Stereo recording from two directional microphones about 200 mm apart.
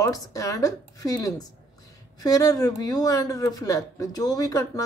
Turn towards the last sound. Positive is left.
turn(degrees=15)  # may be behind; listen again after turning